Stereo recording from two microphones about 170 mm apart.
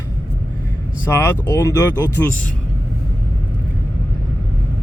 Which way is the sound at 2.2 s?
10° left (ahead or behind).